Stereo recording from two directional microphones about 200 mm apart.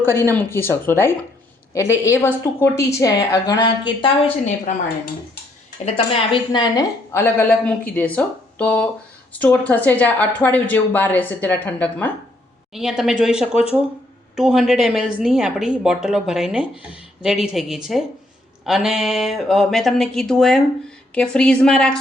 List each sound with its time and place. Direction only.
0.0 s a woman's voice: 10° left (ahead or behind)
5.8 s a woman's voice: 25° left (ahead or behind); by 12.1 s 10° left (ahead or behind)
12.7 s speech: centre (ahead or behind)